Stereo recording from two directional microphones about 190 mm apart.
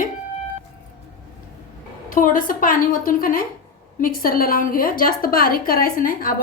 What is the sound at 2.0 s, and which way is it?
A woman's voice, 45° left (ahead or behind).